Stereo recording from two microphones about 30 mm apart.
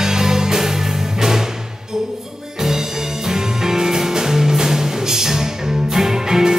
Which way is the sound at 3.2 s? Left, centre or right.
Centre.